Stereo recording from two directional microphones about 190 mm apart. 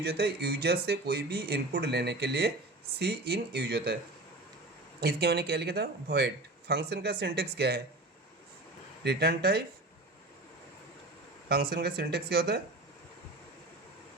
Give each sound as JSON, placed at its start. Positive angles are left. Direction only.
{"t": 0.0, "sound": "speech", "side_deg": -55}
{"t": 4.9, "sound": "speech", "side_deg": -55}
{"t": 9.0, "sound": "speech", "side_deg": -55}
{"t": 11.4, "sound": "speech", "side_deg": -55}